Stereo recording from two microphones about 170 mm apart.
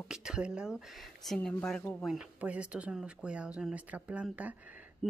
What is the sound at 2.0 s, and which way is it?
Speech, 5° right (ahead or behind).